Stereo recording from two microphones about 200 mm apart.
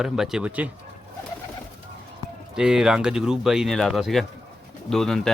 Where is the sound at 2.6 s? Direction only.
5° right (ahead or behind).